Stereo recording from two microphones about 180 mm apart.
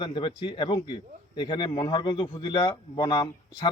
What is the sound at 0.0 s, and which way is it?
Speech, 30° left (ahead or behind).